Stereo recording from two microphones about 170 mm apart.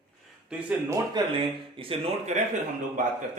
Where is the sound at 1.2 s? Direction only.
25° right (ahead or behind).